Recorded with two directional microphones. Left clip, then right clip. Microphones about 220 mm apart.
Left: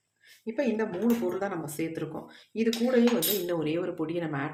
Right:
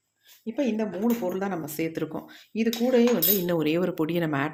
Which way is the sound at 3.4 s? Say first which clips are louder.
Right 4 dB; 45° right (ahead or behind).